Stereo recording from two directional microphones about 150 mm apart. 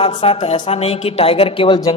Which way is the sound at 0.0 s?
40° left (ahead or behind).